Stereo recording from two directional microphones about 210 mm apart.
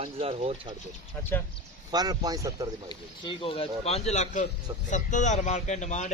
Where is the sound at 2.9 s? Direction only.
20° left (ahead or behind).